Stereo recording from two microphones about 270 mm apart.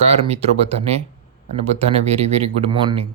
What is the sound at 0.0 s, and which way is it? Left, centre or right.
Speech, right.